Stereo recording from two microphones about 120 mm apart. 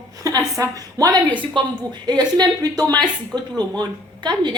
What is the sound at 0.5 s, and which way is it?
A woman's voice, 30° right (ahead or behind).